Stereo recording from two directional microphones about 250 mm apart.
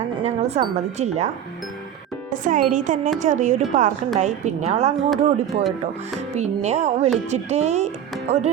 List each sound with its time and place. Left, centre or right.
0.3 s speech: right
2.3 s speech: right
5.1 s speech: centre
6.1 s speech: right